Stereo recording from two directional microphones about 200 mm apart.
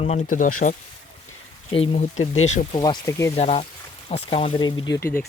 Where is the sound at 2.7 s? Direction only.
20° left (ahead or behind).